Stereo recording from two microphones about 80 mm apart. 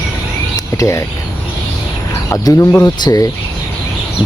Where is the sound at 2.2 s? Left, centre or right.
Left.